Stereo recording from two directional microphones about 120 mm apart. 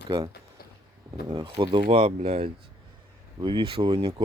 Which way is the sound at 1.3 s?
35° right (ahead or behind).